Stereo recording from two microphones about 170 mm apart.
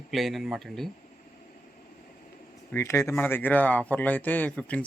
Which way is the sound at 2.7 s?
15° left (ahead or behind).